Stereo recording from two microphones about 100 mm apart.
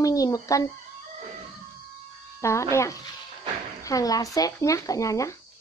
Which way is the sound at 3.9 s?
35° left (ahead or behind).